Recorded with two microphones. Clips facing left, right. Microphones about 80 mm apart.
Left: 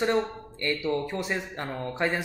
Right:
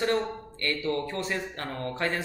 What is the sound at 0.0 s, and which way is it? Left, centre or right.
Speech, centre.